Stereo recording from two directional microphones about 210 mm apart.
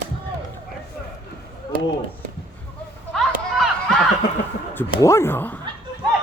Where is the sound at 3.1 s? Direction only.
Centre (ahead or behind).